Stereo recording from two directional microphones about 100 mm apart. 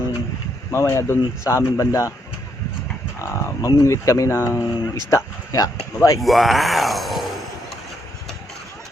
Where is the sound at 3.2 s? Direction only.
25° left (ahead or behind).